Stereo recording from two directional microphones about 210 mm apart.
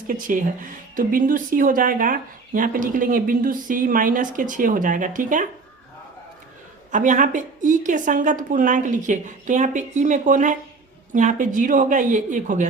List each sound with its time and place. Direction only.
0.1 s speech: 40° right (ahead or behind)
6.9 s speech: 35° right (ahead or behind)